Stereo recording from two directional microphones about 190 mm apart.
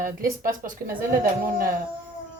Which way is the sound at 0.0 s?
45° right (ahead or behind).